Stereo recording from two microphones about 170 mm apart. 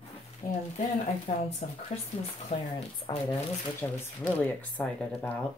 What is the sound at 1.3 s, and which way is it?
Speech, 35° left (ahead or behind).